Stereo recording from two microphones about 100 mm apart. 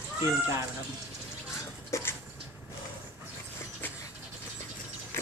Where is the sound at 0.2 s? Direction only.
30° right (ahead or behind).